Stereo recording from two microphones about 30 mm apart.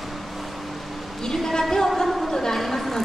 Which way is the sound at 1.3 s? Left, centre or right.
Centre.